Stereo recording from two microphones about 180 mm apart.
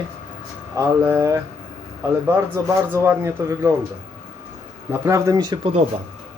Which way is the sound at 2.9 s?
15° right (ahead or behind).